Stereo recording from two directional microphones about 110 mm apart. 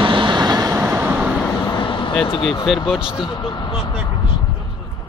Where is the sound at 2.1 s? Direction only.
5° left (ahead or behind).